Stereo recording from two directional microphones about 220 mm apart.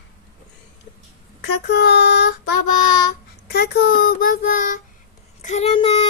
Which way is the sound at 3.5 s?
45° left (ahead or behind).